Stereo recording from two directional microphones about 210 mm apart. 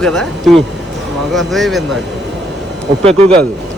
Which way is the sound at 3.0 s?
30° right (ahead or behind).